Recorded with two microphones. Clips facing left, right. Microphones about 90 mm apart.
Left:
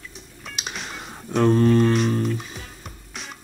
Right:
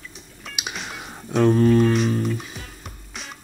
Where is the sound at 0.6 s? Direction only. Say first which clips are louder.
Right 1 dB; centre (ahead or behind).